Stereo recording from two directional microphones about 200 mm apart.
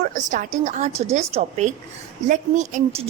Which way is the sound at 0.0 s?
40° right (ahead or behind).